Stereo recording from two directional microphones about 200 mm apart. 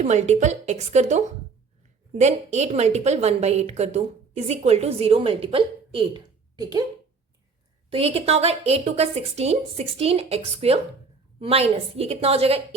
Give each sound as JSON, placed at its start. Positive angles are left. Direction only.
{"t": 0.0, "sound": "a woman's voice", "side_deg": -35}
{"t": 7.9, "sound": "a woman's voice", "side_deg": -30}